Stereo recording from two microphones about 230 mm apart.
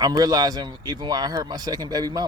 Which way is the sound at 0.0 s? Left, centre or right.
Centre.